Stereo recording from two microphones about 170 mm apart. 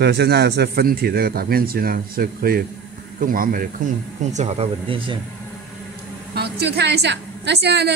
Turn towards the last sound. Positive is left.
turn(degrees=-80)